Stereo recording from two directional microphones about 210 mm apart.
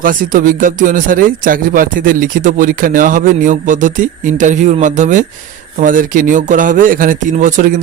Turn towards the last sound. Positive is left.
turn(degrees=-40)  # may be behind; listen again after turning